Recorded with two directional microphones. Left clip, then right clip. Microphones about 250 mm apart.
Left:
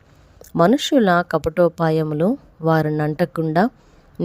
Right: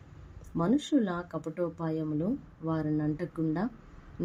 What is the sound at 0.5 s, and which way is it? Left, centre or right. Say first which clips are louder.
Speech: left 13 dB; left.